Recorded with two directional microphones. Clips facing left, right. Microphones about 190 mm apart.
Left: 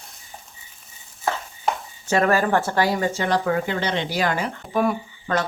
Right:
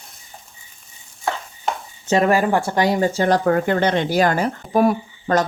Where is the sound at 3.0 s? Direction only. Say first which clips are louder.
Right 5 dB; 35° right (ahead or behind).